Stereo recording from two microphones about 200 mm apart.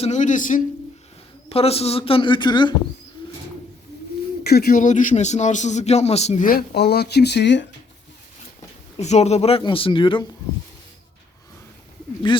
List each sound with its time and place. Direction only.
0.0 s speech: 35° left (ahead or behind)
1.5 s a woman's voice: 30° left (ahead or behind)
4.4 s speech: 50° left (ahead or behind)
9.0 s a woman's voice: 35° left (ahead or behind)
12.3 s a woman's voice: 25° left (ahead or behind)